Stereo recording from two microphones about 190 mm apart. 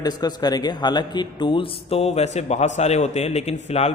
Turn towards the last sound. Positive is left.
turn(degrees=35)  # may be behind; listen again after turning